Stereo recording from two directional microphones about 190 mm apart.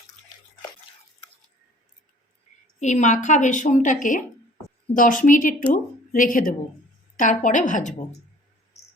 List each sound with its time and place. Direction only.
2.8 s a woman's voice: 40° left (ahead or behind)